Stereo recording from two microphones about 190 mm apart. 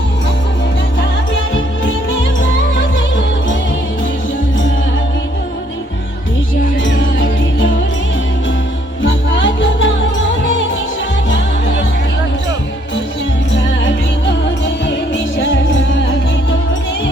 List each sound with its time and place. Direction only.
1.5 s music: 90° left
6.8 s music: 85° left
9.0 s music: 80° left
13.8 s music: 70° left (ahead or behind)